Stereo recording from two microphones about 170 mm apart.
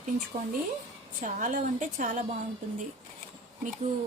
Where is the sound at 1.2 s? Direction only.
50° right (ahead or behind).